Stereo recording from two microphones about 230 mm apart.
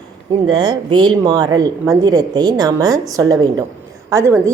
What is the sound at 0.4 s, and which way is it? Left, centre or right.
A woman's voice, centre.